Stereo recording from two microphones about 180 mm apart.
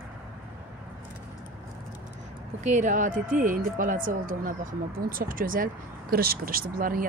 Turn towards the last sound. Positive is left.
turn(degrees=-50)  # may be behind; listen again after turning